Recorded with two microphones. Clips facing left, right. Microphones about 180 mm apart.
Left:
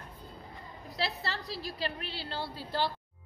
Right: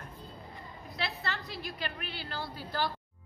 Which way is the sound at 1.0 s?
35° left (ahead or behind).